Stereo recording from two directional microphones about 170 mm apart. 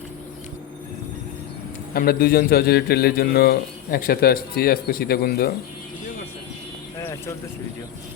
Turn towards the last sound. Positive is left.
turn(degrees=15)  # may be behind; listen again after turning